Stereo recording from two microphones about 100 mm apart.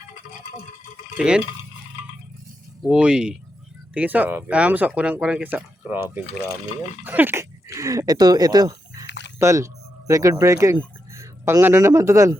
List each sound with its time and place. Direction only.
2.8 s speech: 10° right (ahead or behind)
6.2 s speech: 90° left
7.0 s a sound: 20° right (ahead or behind)
10.1 s speech: 35° right (ahead or behind)